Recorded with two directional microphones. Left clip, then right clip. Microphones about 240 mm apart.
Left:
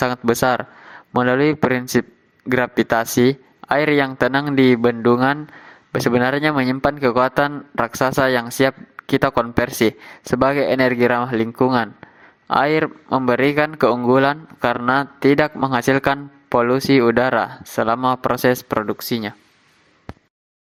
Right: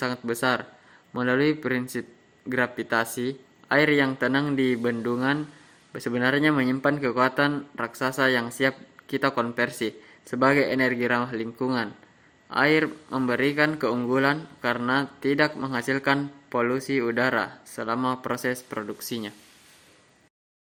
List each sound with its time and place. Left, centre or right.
0.0 s speech: left